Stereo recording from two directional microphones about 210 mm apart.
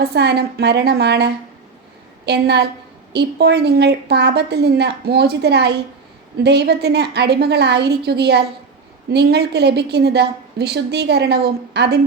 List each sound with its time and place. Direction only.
0.0 s a woman's voice: 50° right (ahead or behind)